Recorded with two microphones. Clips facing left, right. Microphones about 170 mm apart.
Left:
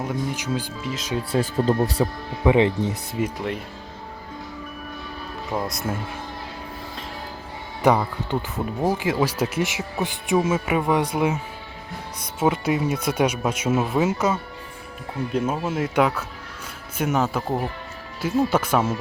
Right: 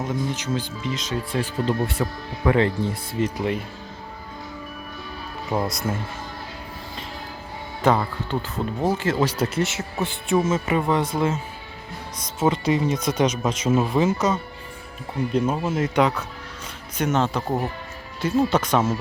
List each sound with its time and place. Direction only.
0.3 s speech: 10° left (ahead or behind)
1.4 s speech: 40° left (ahead or behind)
2.4 s speech: 20° left (ahead or behind)
3.3 s speech: centre (ahead or behind)
5.5 s speech: 5° right (ahead or behind)
7.8 s speech: 15° left (ahead or behind)
12.4 s speech: 10° left (ahead or behind)